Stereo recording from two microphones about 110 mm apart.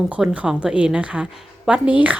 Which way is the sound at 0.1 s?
10° right (ahead or behind).